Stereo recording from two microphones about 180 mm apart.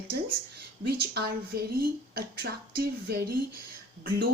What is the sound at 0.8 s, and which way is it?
Speech, 60° right (ahead or behind).